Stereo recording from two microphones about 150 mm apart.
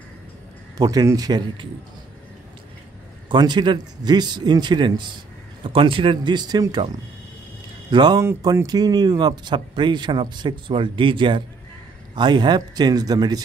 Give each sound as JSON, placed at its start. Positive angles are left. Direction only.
{"t": 0.7, "sound": "a man's voice", "side_deg": -25}
{"t": 3.3, "sound": "a man's voice", "side_deg": -30}